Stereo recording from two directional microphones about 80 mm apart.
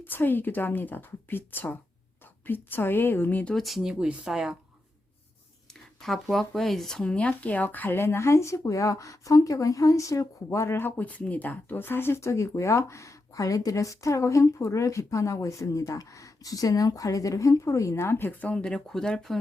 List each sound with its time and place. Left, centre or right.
0.0 s a woman's voice: left
3.5 s speech: centre
6.0 s speech: centre